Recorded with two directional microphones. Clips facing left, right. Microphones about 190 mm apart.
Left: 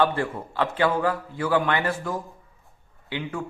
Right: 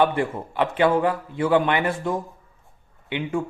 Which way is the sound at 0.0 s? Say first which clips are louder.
Right 2 dB; 20° right (ahead or behind).